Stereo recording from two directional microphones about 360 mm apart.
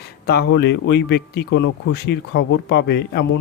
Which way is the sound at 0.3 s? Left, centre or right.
Left.